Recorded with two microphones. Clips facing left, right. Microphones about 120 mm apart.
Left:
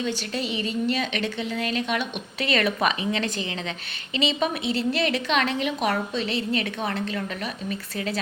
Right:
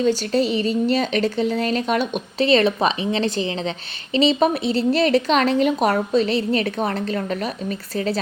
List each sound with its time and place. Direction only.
0.0 s a woman's voice: 40° right (ahead or behind)